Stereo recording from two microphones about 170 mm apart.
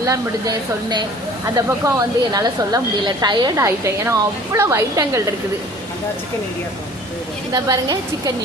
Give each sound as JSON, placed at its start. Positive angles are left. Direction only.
{"t": 0.0, "sound": "a woman's voice", "side_deg": -20}
{"t": 7.5, "sound": "a woman's voice", "side_deg": -20}